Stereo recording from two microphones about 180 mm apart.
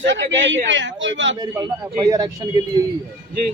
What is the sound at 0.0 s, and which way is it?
Speech, 90° right.